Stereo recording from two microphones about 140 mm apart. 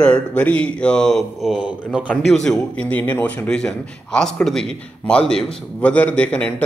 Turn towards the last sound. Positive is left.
turn(degrees=10)  # may be behind; listen again after turning